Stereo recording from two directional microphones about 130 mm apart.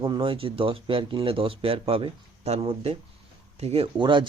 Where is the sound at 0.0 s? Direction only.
40° right (ahead or behind).